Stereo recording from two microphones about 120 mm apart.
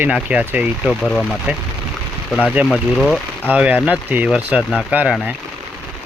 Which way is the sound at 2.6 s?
5° left (ahead or behind).